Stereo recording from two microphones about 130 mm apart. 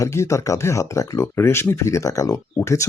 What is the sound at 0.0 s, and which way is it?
Speech, 20° left (ahead or behind).